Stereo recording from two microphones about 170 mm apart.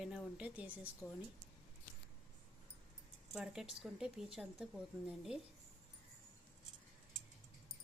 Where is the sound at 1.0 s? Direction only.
20° left (ahead or behind).